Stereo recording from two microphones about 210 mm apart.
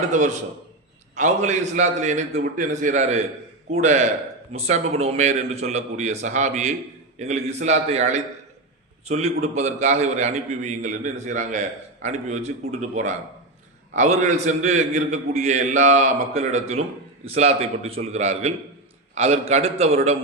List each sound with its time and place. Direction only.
0.1 s a man's voice: 35° right (ahead or behind)